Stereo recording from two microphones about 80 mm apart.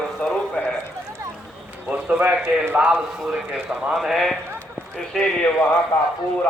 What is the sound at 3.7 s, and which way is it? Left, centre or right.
A man's voice, centre.